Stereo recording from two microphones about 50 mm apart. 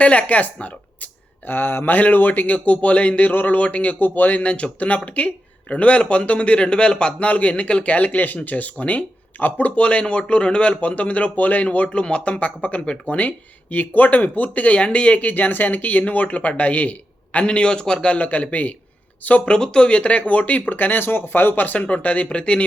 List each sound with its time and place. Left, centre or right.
0.0 s speech: left
19.5 s speech: centre; by 21.8 s left
21.8 s speech: left